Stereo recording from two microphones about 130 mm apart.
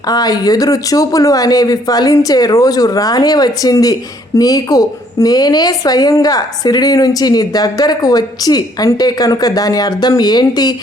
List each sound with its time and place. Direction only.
0.1 s a woman's voice: 30° left (ahead or behind)